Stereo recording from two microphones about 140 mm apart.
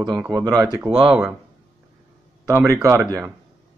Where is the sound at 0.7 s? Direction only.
10° right (ahead or behind).